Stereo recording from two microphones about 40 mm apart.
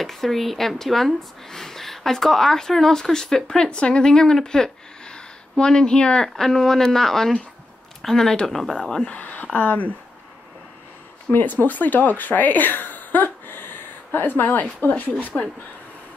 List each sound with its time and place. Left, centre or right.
0.0 s speech: centre; by 6.2 s left
6.2 s speech: centre
9.1 s speech: left
11.3 s a woman's voice: left